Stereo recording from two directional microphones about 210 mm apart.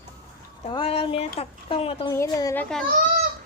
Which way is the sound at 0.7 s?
25° left (ahead or behind).